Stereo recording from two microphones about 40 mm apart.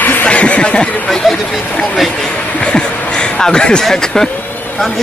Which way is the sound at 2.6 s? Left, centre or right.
Left.